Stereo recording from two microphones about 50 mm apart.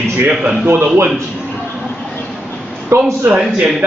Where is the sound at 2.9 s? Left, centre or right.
Right.